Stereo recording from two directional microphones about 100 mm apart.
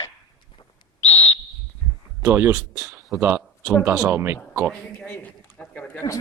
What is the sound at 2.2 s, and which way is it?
Speech, 25° right (ahead or behind).